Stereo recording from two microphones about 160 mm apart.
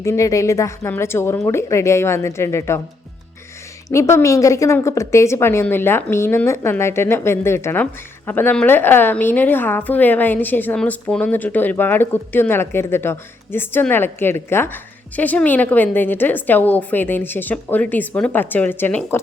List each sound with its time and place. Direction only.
0.0 s a woman's voice: 20° left (ahead or behind)
3.8 s a woman's voice: 20° left (ahead or behind)